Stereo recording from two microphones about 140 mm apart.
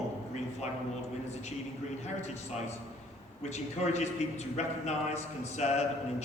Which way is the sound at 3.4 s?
55° left (ahead or behind).